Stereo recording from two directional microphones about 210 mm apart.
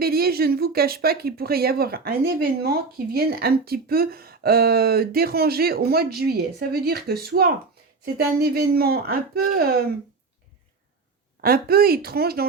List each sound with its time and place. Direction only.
0.0 s speech: 45° right (ahead or behind)
11.3 s speech: 45° right (ahead or behind)